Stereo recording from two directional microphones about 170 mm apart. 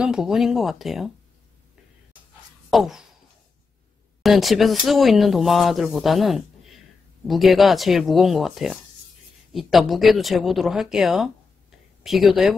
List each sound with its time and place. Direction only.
0.0 s speech: 5° right (ahead or behind)
2.7 s speech: centre (ahead or behind)
4.2 s speech: centre (ahead or behind)